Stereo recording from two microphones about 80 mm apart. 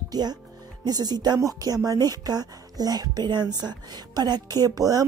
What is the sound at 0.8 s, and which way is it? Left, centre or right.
Speech, right.